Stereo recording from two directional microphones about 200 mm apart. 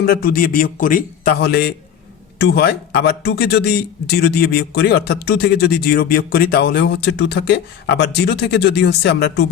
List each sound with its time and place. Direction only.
0.0 s a man's voice: 50° left (ahead or behind)